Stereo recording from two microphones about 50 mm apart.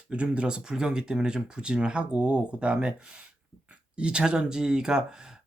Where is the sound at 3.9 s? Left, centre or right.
Centre.